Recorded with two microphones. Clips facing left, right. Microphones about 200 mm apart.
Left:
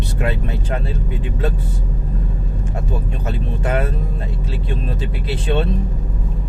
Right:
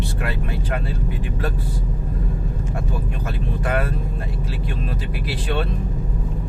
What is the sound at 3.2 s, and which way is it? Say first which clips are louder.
Speech: left 2 dB; 25° left (ahead or behind).